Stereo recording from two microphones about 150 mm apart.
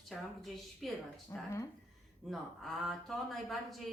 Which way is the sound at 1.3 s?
20° left (ahead or behind).